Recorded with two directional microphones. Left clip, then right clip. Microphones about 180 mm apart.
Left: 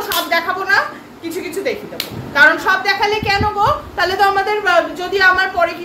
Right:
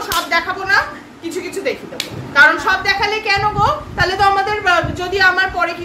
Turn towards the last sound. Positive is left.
turn(degrees=0)  # may be behind; listen again after turning